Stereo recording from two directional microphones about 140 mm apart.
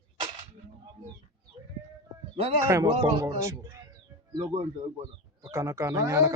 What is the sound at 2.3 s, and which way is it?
Speech, 45° right (ahead or behind).